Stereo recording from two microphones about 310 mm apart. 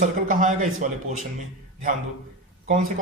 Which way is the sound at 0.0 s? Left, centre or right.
Right.